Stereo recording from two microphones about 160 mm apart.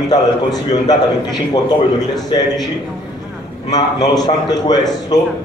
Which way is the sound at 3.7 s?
25° left (ahead or behind).